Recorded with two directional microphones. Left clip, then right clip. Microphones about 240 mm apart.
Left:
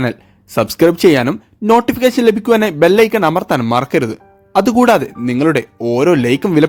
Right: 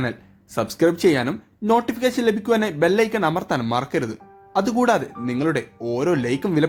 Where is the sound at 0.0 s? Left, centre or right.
Left.